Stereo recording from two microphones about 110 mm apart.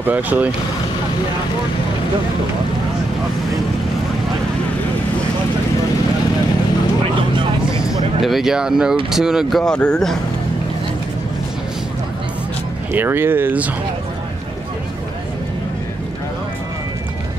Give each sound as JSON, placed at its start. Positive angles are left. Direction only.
{"t": 0.0, "sound": "speech", "side_deg": -15}
{"t": 8.2, "sound": "speech", "side_deg": 0}
{"t": 12.9, "sound": "speech", "side_deg": -20}